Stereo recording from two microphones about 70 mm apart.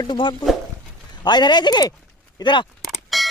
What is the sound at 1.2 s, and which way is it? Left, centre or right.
Speech, left.